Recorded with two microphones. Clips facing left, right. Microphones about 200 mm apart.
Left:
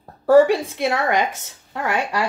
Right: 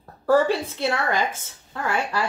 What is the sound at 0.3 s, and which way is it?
Speech, 15° left (ahead or behind).